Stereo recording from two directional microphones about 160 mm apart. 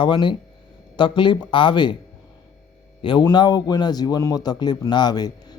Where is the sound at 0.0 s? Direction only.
30° left (ahead or behind).